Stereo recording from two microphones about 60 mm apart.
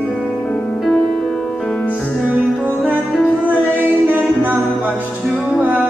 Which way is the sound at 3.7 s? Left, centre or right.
Right.